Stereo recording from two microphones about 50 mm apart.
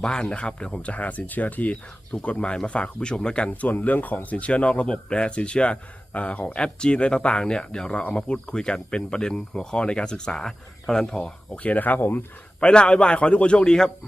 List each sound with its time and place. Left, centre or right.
0.0 s speech: centre; by 1.7 s left
1.7 s speech: left
3.6 s speech: left; by 11.2 s centre
11.2 s speech: left
12.5 s speech: left